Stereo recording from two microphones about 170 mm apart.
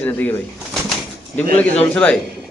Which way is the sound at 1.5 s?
10° left (ahead or behind).